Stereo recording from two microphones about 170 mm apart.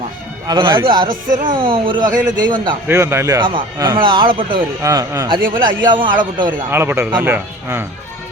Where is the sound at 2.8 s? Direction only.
15° right (ahead or behind).